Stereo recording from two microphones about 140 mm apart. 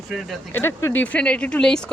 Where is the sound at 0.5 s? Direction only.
15° left (ahead or behind).